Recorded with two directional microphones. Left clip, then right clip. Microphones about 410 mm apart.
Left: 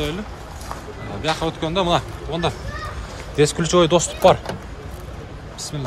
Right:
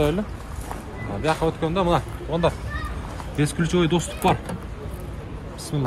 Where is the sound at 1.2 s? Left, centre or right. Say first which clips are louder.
Even; centre.